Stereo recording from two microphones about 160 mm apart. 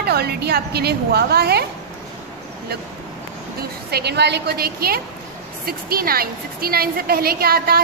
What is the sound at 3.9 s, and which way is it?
A woman's voice, 90° right.